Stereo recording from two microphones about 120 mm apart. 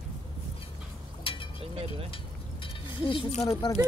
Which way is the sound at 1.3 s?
45° left (ahead or behind).